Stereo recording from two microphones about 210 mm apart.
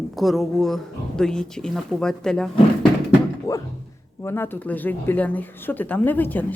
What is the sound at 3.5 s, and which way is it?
Speech, 15° left (ahead or behind).